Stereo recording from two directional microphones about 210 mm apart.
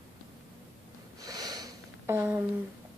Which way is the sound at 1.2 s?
20° right (ahead or behind).